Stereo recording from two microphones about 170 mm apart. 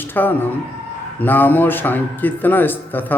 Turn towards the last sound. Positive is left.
turn(degrees=10)  # may be behind; listen again after turning